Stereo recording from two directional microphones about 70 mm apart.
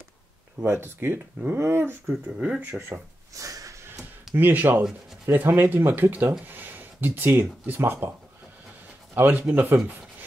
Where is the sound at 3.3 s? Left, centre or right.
Right.